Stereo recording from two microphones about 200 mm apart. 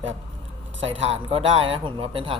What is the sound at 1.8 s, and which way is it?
Speech, 25° right (ahead or behind).